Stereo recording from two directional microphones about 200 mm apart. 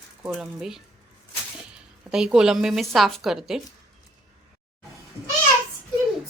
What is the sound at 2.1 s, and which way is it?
Speech, 5° right (ahead or behind).